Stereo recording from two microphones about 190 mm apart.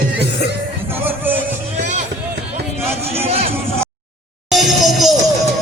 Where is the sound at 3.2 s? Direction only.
30° right (ahead or behind).